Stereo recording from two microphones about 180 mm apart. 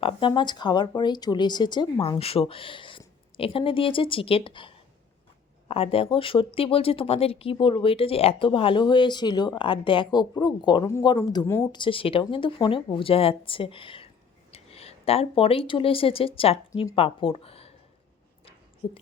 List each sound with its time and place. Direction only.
0.0 s speech: 25° left (ahead or behind)
18.8 s speech: 30° left (ahead or behind)